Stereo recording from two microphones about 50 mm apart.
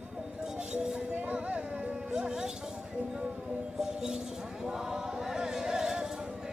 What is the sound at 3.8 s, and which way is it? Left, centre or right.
Speech, centre.